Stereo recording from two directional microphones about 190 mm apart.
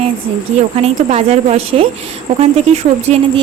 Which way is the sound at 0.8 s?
35° right (ahead or behind).